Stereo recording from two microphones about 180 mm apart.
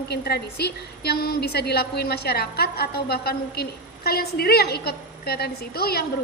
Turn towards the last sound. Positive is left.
turn(degrees=60)  # may be behind; listen again after turning